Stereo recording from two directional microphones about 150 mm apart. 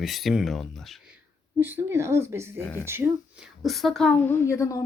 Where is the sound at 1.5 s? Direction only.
15° right (ahead or behind).